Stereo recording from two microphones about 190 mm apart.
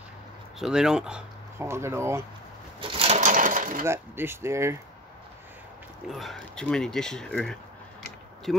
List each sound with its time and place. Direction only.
0.6 s speech: 5° right (ahead or behind)
2.8 s a sound: 30° right (ahead or behind)
3.2 s sewing machine: 45° right (ahead or behind)
3.8 s speech: 10° right (ahead or behind)
6.0 s speech: centre (ahead or behind)